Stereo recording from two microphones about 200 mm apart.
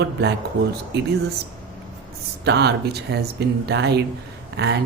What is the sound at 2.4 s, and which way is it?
Speech, 55° right (ahead or behind).